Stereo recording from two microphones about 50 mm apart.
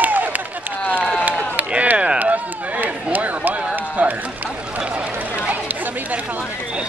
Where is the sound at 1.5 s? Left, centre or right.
Right.